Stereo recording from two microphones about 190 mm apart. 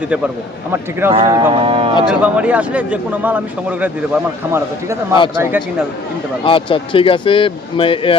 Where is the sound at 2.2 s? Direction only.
5° right (ahead or behind).